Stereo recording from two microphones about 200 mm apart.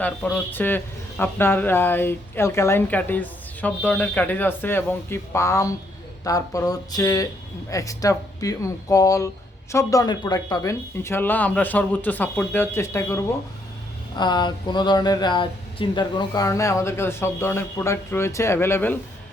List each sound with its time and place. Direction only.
0.0 s speech: 5° left (ahead or behind)